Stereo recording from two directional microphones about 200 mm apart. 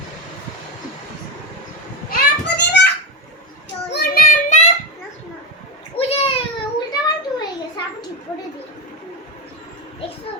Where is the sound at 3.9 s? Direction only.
50° left (ahead or behind).